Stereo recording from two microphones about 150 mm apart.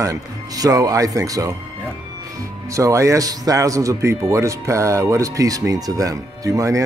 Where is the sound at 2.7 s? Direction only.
20° right (ahead or behind).